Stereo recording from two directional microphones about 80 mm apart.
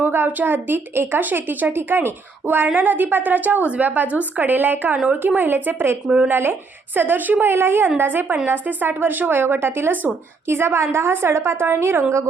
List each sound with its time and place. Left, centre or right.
0.0 s a woman's voice: right